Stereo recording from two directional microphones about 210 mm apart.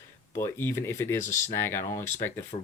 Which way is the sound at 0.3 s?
10° left (ahead or behind).